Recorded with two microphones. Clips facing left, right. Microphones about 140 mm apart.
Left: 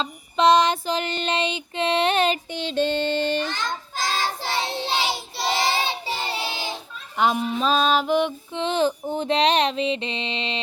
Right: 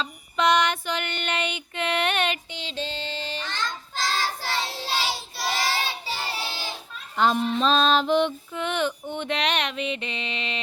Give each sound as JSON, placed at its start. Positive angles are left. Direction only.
{"t": 0.0, "sound": "child singing", "side_deg": 30}
{"t": 2.5, "sound": "music", "side_deg": 50}
{"t": 3.4, "sound": "child singing", "side_deg": 15}
{"t": 7.2, "sound": "music", "side_deg": 10}
{"t": 8.5, "sound": "mantra", "side_deg": 30}